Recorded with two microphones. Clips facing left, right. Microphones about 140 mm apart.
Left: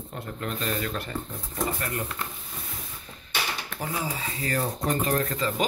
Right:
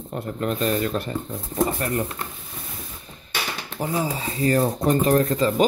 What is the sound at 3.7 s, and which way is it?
Speech, 30° right (ahead or behind).